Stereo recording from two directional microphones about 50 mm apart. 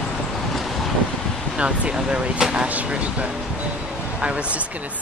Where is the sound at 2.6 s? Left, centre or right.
Right.